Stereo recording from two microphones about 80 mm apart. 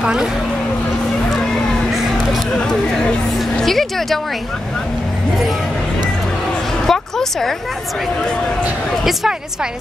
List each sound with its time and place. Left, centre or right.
0.0 s speech: centre
2.5 s speech: centre
6.9 s a sound: centre
9.0 s a woman's voice: centre